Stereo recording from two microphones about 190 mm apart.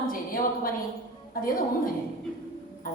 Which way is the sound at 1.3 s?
45° left (ahead or behind).